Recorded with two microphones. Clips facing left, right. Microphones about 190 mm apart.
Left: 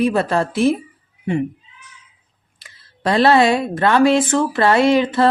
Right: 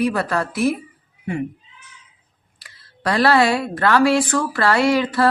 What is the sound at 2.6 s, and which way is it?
A woman's voice, 20° left (ahead or behind).